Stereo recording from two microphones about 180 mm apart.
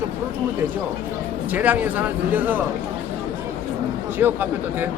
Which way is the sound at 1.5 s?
10° right (ahead or behind).